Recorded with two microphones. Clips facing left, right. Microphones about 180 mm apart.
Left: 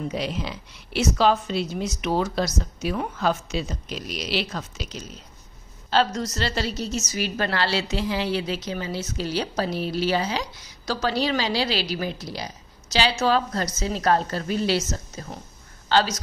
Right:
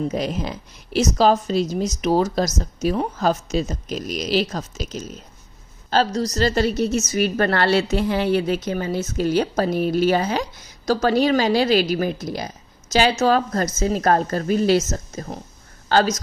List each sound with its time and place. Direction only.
0.1 s a woman's voice: 45° right (ahead or behind)